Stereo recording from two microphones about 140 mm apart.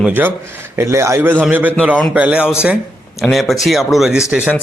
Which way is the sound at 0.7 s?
20° right (ahead or behind).